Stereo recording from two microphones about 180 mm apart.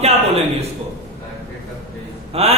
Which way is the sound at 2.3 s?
35° right (ahead or behind).